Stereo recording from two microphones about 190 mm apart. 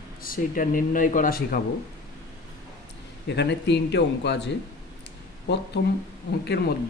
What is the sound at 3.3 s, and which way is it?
Speech, 65° left (ahead or behind).